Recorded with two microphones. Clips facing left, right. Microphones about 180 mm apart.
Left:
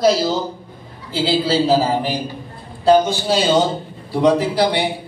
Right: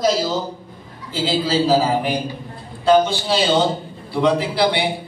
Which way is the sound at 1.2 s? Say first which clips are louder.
Left 1 dB; 30° left (ahead or behind).